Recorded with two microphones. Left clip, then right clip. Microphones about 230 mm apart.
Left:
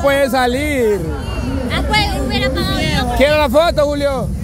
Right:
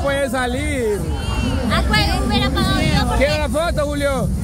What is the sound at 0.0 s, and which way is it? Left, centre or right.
Speech, left.